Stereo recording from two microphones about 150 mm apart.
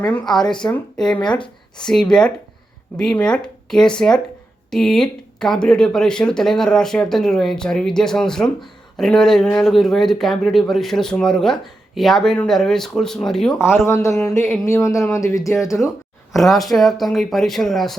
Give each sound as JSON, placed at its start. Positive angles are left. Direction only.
{"t": 0.0, "sound": "speech", "side_deg": 5}
{"t": 13.8, "sound": "speech", "side_deg": 20}
{"t": 16.3, "sound": "speech", "side_deg": 0}